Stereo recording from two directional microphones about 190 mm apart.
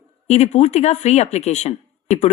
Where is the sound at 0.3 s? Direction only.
35° left (ahead or behind).